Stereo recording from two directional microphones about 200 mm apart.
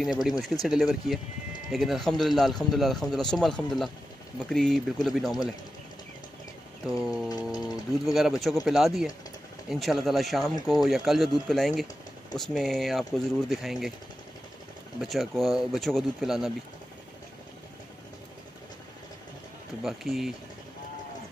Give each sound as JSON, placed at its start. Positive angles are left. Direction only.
{"t": 0.0, "sound": "a man's voice", "side_deg": 0}
{"t": 7.2, "sound": "a sound", "side_deg": 20}
{"t": 8.0, "sound": "a man's voice", "side_deg": 0}
{"t": 15.0, "sound": "a man's voice", "side_deg": 0}
{"t": 19.8, "sound": "a man's voice", "side_deg": 0}